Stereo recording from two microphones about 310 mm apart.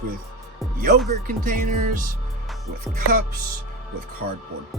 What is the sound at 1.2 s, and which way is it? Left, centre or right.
Speech, right.